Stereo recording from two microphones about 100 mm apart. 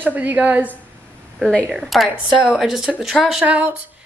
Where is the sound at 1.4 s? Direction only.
10° left (ahead or behind).